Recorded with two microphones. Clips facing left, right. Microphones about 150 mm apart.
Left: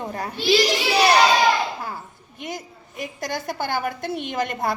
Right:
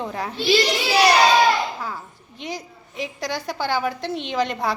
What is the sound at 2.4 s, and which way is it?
A woman's voice, 50° left (ahead or behind).